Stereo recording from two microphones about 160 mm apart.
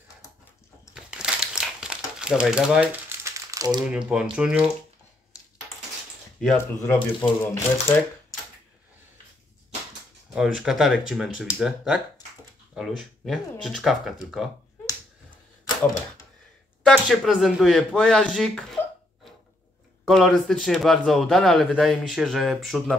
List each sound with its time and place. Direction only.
0.9 s crumpling: 5° right (ahead or behind)
3.3 s crumpling: 20° right (ahead or behind)
4.1 s speech: 10° right (ahead or behind)
6.4 s speech: 15° left (ahead or behind)
10.3 s speech: 5° right (ahead or behind)
16.8 s speech: centre (ahead or behind)
20.1 s speech: centre (ahead or behind)